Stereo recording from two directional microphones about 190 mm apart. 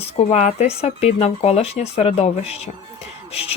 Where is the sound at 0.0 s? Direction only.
35° left (ahead or behind).